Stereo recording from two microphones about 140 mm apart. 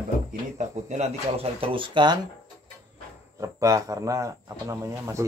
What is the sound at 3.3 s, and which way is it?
Speech, 20° right (ahead or behind).